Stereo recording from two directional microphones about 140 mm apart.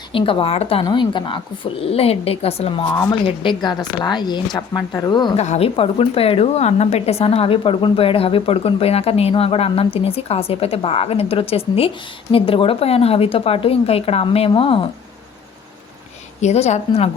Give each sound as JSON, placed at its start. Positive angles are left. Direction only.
{"t": 0.1, "sound": "a woman's voice", "side_deg": 40}
{"t": 1.8, "sound": "speech", "side_deg": 45}
{"t": 3.1, "sound": "a woman's voice", "side_deg": 35}
{"t": 5.4, "sound": "speech", "side_deg": 50}
{"t": 16.4, "sound": "speech", "side_deg": 50}